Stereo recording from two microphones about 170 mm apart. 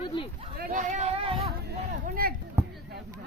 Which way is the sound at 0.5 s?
60° right (ahead or behind).